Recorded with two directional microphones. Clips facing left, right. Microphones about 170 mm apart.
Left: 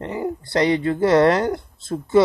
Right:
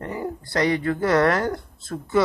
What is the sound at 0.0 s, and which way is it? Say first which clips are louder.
Speech: left 4 dB; 25° left (ahead or behind).